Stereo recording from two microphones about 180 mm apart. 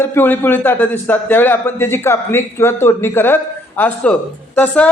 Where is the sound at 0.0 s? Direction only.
10° left (ahead or behind).